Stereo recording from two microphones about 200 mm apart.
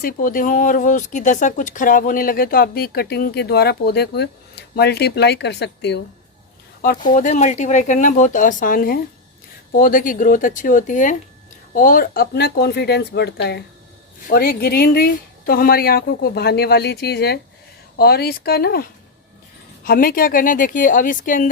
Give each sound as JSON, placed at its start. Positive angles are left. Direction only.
{"t": 0.0, "sound": "speech", "side_deg": 45}
{"t": 6.8, "sound": "speech", "side_deg": 40}